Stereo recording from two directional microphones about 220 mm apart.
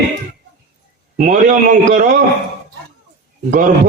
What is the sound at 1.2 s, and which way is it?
Speech, 35° right (ahead or behind).